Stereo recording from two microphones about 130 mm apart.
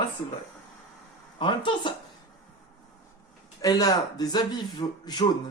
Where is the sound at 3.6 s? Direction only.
30° left (ahead or behind).